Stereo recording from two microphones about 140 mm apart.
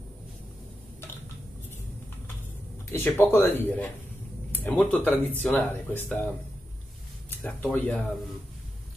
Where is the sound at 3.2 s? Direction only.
15° left (ahead or behind).